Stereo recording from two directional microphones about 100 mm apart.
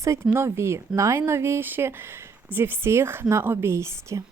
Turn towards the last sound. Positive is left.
turn(degrees=-30)  # may be behind; listen again after turning